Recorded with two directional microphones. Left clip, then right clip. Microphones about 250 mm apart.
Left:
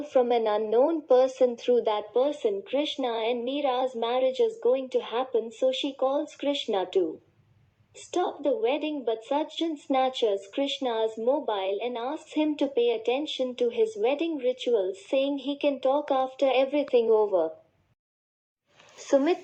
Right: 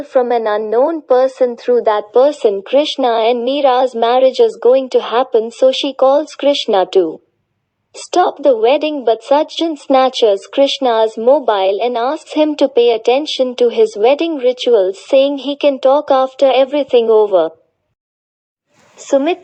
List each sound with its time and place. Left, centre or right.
0.0 s a woman's voice: centre
2.1 s speech: right
18.9 s speech: right